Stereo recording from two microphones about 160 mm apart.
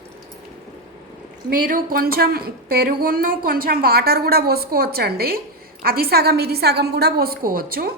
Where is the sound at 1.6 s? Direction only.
65° right (ahead or behind).